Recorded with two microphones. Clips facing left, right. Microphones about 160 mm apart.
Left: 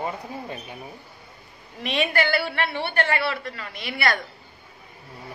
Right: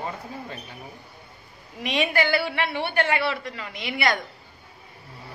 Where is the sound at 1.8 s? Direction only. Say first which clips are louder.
Even; 15° right (ahead or behind).